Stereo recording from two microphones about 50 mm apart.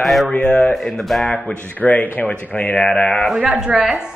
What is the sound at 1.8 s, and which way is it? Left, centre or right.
Speech, left.